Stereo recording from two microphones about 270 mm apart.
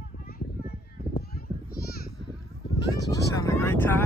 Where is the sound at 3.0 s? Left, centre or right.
Centre.